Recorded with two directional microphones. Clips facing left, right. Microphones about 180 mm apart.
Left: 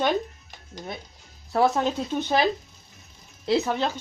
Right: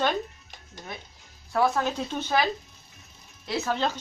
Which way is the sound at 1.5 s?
25° left (ahead or behind).